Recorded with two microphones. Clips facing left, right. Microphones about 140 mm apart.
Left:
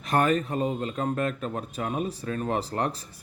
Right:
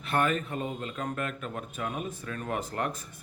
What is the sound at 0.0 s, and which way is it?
Speech, 40° left (ahead or behind).